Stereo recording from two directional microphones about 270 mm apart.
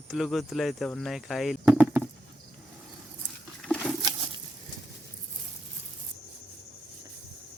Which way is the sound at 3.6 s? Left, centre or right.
Centre.